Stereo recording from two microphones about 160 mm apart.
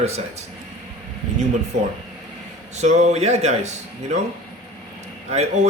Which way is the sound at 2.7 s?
45° right (ahead or behind).